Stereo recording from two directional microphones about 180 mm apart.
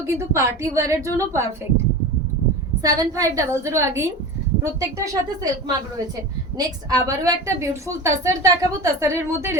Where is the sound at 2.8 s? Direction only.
20° right (ahead or behind).